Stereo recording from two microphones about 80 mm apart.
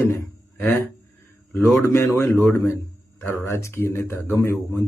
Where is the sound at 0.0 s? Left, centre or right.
Left.